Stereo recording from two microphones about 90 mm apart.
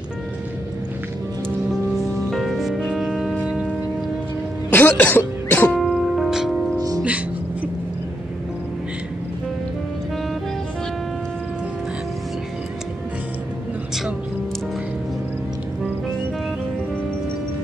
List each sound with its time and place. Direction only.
1.7 s music: centre (ahead or behind)
4.6 s speech: 20° left (ahead or behind)
5.7 s music: centre (ahead or behind)